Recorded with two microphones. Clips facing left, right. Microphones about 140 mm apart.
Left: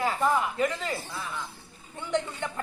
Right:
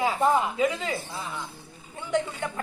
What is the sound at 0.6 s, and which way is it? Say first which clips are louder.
Speech: right 2 dB; 5° right (ahead or behind).